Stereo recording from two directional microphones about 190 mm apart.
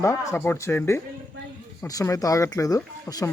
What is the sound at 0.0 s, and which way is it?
Speech, 15° left (ahead or behind).